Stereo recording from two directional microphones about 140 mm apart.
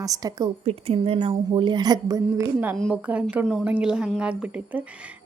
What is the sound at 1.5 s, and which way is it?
A woman's voice, 35° right (ahead or behind).